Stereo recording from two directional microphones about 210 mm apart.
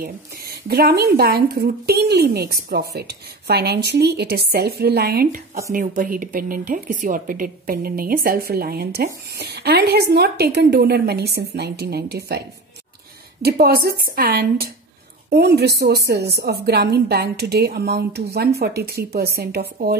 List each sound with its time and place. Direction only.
0.0 s speech: 45° right (ahead or behind)